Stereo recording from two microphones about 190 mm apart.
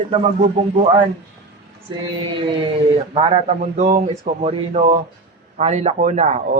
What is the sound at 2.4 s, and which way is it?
Speech, 25° right (ahead or behind).